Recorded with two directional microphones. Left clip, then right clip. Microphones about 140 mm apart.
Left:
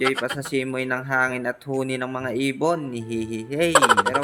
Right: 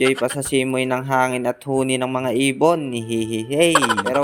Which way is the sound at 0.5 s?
40° right (ahead or behind).